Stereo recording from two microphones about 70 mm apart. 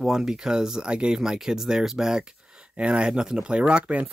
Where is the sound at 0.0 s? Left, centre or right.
Centre.